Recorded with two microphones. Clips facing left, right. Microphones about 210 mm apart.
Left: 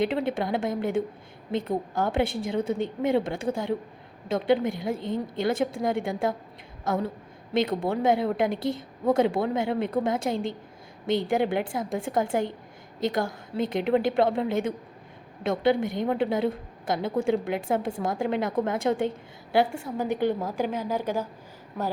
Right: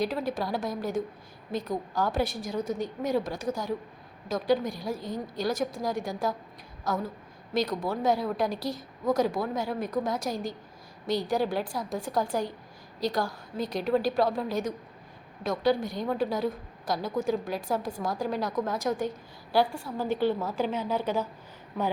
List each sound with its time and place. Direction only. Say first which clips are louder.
0.0 s a woman's voice: left 4 dB; 25° left (ahead or behind)